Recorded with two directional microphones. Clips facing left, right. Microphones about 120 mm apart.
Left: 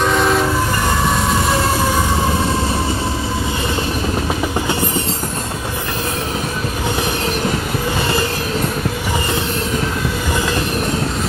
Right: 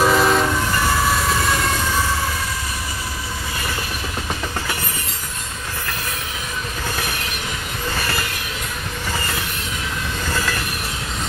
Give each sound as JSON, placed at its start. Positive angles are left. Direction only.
{"t": 0.0, "sound": "train", "side_deg": 0}
{"t": 10.3, "sound": "train", "side_deg": 20}